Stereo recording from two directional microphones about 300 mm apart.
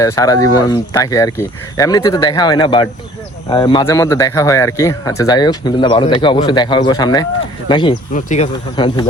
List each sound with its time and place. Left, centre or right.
0.0 s speech: centre